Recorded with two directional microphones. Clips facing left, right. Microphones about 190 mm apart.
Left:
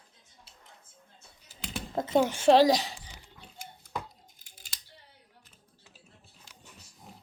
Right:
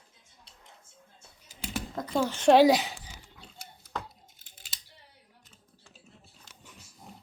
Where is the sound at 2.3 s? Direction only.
Centre (ahead or behind).